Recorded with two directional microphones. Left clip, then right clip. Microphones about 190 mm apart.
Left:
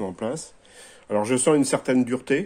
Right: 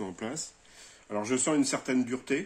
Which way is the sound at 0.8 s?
55° left (ahead or behind).